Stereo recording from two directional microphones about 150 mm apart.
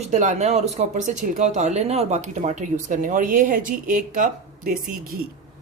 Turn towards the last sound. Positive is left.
turn(degrees=-75)  # may be behind; listen again after turning